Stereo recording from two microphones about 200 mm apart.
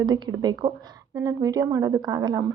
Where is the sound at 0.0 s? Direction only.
20° right (ahead or behind).